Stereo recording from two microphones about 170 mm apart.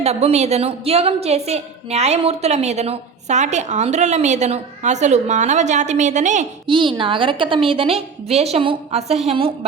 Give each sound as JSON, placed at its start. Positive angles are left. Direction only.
{"t": 0.0, "sound": "a woman's voice", "side_deg": -35}
{"t": 6.7, "sound": "a woman's voice", "side_deg": -30}